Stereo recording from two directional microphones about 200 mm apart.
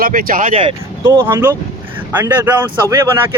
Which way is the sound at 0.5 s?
30° right (ahead or behind).